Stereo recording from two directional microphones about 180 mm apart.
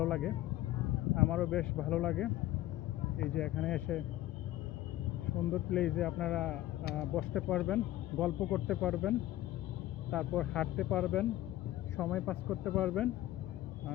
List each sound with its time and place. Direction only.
0.0 s speech: 5° left (ahead or behind)
3.3 s speech: 5° left (ahead or behind)
5.7 s speech: 5° left (ahead or behind)